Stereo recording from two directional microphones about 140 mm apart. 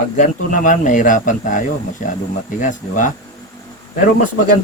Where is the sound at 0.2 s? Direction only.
65° left (ahead or behind).